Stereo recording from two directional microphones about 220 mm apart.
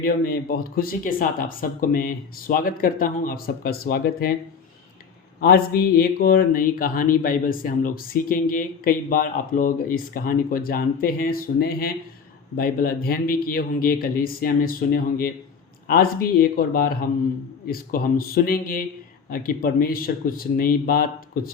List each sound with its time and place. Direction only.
0.0 s speech: 40° left (ahead or behind)
6.0 s speech: 45° left (ahead or behind)